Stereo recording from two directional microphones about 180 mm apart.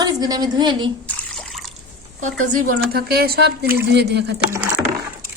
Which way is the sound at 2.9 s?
60° right (ahead or behind).